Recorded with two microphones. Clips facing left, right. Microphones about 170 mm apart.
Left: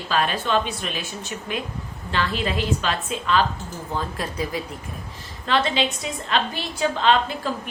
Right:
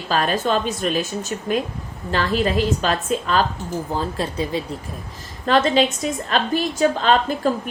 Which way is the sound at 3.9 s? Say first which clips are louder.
Right 1 dB; 30° right (ahead or behind).